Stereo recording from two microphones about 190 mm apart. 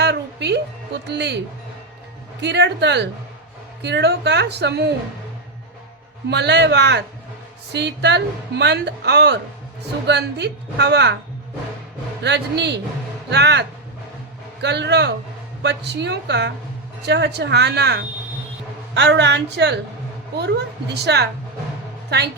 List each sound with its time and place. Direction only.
0.0 s music: 65° right (ahead or behind)
1.0 s speech: 60° right (ahead or behind)
2.4 s speech: 65° right (ahead or behind)
6.3 s speech: 65° right (ahead or behind)
12.2 s speech: 65° right (ahead or behind)